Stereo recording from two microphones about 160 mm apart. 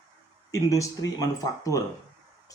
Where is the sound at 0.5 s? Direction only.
20° left (ahead or behind).